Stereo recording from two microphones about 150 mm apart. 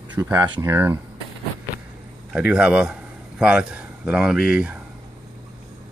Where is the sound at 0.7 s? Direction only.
15° right (ahead or behind).